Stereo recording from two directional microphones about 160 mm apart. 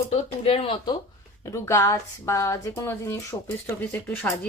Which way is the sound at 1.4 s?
20° left (ahead or behind).